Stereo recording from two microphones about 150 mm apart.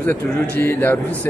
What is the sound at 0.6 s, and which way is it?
Speech, 15° left (ahead or behind).